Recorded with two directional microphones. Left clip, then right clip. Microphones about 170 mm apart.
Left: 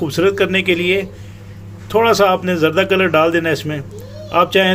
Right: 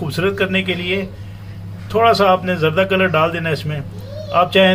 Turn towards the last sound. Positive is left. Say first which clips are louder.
# even
turn(degrees=50)  # may be behind; listen again after turning